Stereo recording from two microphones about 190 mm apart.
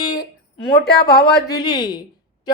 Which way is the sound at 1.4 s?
20° left (ahead or behind).